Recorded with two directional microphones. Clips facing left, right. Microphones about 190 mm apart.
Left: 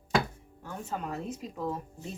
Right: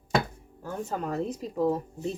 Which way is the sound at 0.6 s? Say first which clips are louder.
Right 5 dB; 40° right (ahead or behind).